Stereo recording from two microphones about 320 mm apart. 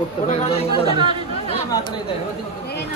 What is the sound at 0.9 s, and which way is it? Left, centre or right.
Speech, centre.